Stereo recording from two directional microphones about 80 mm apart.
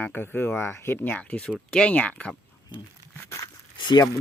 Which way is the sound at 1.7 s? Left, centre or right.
Centre.